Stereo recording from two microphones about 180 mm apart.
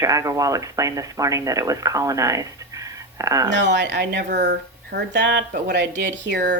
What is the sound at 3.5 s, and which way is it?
Speech, 80° right.